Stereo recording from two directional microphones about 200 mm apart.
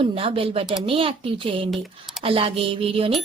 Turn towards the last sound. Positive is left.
turn(degrees=-30)  # may be behind; listen again after turning